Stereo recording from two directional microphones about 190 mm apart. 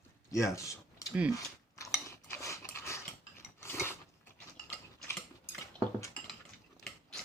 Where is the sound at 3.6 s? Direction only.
10° left (ahead or behind).